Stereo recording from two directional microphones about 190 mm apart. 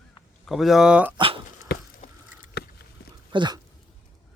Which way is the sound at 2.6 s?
60° left (ahead or behind).